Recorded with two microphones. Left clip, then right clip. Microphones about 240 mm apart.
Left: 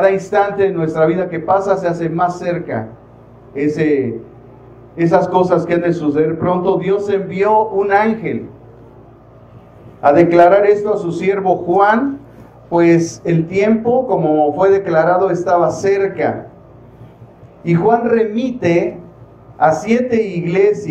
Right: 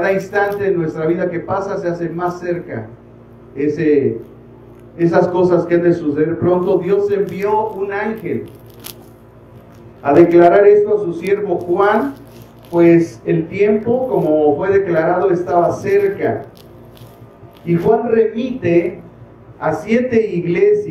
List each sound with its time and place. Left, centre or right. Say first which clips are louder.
0.0 s a man's voice: left 3 dB; left
10.0 s a man's voice: left 1 dB; left
17.6 s a man's voice: left 1 dB; left